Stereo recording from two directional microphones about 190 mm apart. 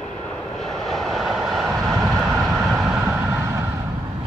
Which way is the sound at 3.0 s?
15° right (ahead or behind).